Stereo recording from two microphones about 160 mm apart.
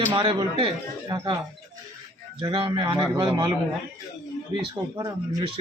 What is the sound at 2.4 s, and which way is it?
A man's voice, 30° right (ahead or behind).